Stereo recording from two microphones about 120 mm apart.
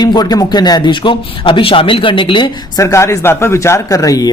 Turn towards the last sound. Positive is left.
turn(degrees=30)  # may be behind; listen again after turning